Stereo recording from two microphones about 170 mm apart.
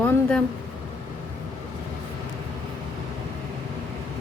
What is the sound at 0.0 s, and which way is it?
Speech, 5° left (ahead or behind).